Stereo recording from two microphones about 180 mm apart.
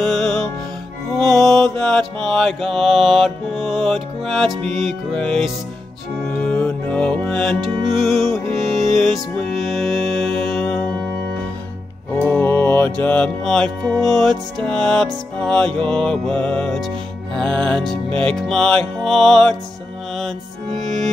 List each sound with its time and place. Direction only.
0.0 s music: centre (ahead or behind)
1.1 s mantra: centre (ahead or behind)
6.3 s music: 5° left (ahead or behind)
12.3 s music: 10° left (ahead or behind)